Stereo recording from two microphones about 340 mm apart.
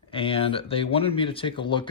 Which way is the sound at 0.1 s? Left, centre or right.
Centre.